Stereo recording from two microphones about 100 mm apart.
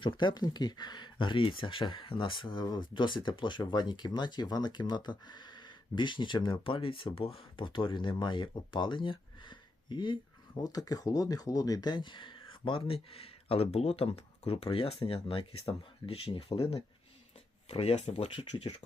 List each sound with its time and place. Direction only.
0.0 s speech: 50° left (ahead or behind)
10.5 s speech: 40° left (ahead or behind); by 16.6 s 60° left (ahead or behind)
17.7 s speech: 90° left